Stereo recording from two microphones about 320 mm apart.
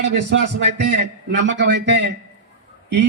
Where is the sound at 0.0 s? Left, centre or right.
Right.